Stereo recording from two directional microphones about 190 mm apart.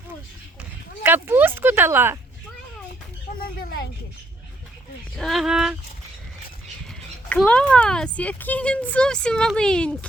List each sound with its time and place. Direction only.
1.0 s speech: 10° right (ahead or behind)
3.4 s a sound: 50° left (ahead or behind)
5.1 s speech: centre (ahead or behind)
7.3 s speech: 5° left (ahead or behind)